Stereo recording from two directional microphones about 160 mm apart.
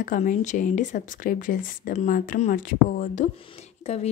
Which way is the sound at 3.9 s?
45° left (ahead or behind).